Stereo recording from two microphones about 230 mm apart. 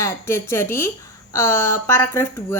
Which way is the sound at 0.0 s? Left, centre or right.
Centre.